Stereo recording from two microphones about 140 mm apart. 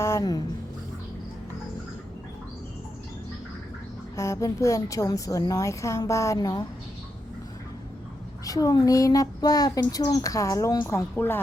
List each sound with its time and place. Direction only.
0.0 s a sound: 25° left (ahead or behind)
4.1 s speech: 20° left (ahead or behind)
8.4 s speech: 25° left (ahead or behind)